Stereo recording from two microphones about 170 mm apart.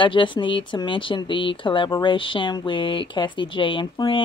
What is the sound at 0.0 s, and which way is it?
Speech, 30° left (ahead or behind).